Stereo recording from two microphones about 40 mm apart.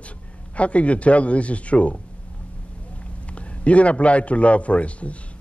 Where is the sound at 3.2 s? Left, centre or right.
Left.